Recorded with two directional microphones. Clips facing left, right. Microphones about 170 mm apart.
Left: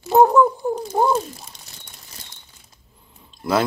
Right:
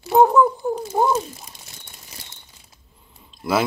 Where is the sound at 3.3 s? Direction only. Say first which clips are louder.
Left 1 dB; 5° right (ahead or behind).